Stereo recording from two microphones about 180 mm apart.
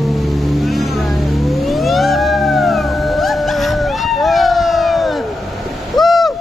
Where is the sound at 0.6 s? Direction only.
Centre (ahead or behind).